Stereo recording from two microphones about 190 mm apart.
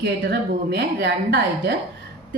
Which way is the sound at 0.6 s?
60° right (ahead or behind).